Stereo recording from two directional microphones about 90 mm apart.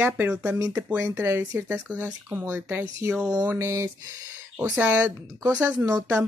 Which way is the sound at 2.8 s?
30° right (ahead or behind).